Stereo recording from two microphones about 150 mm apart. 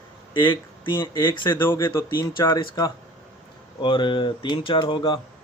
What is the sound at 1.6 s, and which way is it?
Speech, 15° left (ahead or behind).